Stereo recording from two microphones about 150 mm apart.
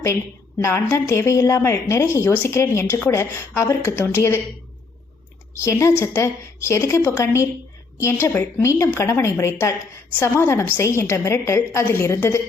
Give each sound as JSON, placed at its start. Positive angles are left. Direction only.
{"t": 0.6, "sound": "a woman's voice", "side_deg": 15}
{"t": 5.5, "sound": "a woman's voice", "side_deg": 20}